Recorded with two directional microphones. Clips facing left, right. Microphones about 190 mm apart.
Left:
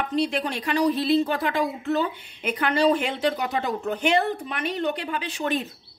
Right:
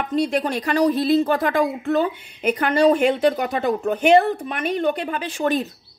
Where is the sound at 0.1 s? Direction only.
45° right (ahead or behind).